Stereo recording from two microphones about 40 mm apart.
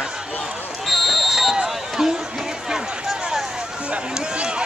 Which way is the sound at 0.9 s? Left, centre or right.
Centre.